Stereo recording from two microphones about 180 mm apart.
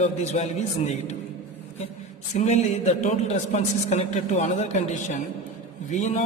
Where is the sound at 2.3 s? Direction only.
40° left (ahead or behind).